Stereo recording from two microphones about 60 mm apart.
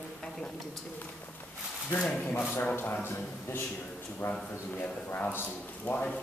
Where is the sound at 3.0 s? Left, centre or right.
Left.